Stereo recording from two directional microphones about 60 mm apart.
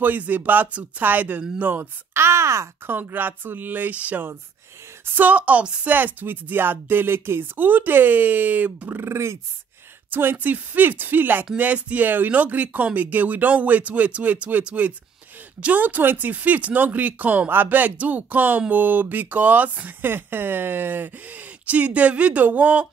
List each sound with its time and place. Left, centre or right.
0.0 s speech: right
1.8 s a child's voice: right
2.9 s speech: right
9.0 s a child's voice: right
10.1 s speech: right